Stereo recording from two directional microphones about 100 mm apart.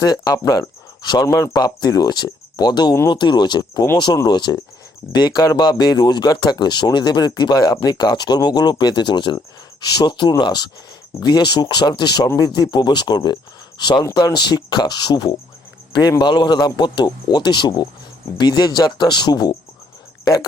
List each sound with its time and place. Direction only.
0.0 s cricket: 40° left (ahead or behind)
1.2 s speech: 40° left (ahead or behind)
12.4 s cricket: 40° left (ahead or behind)
12.7 s speech: 45° left (ahead or behind)
14.0 s speech: 35° left (ahead or behind)
20.2 s cricket: 40° left (ahead or behind)